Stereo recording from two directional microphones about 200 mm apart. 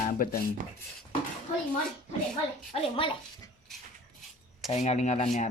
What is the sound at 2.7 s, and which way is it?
Speech, 30° left (ahead or behind).